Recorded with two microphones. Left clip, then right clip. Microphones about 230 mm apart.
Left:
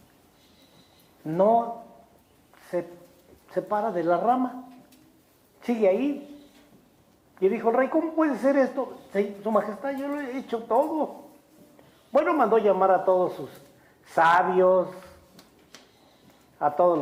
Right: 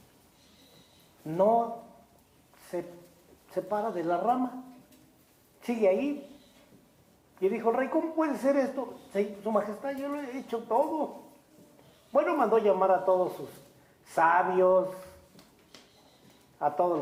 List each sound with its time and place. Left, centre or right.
1.2 s speech: left
2.7 s speech: left
5.5 s a woman's voice: left
7.3 s speech: left
12.1 s speech: left
16.6 s speech: left